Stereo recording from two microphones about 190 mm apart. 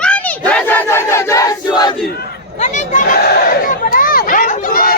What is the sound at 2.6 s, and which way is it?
Crowd, 40° left (ahead or behind).